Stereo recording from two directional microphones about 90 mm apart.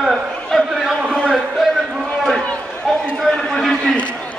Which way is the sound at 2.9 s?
Centre (ahead or behind).